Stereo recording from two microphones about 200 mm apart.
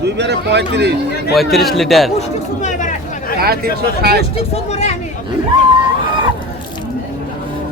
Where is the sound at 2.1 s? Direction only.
35° left (ahead or behind).